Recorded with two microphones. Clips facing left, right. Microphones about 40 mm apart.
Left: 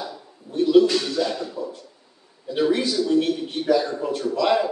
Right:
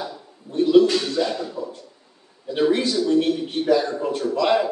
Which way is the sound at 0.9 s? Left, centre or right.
Centre.